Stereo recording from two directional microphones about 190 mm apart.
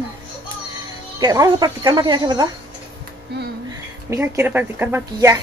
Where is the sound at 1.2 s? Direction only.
20° right (ahead or behind).